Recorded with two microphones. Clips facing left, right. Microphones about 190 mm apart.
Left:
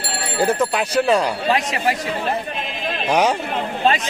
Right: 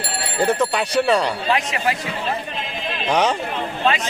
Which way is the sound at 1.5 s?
35° left (ahead or behind).